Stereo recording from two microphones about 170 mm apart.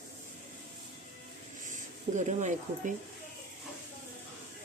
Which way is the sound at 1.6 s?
45° right (ahead or behind).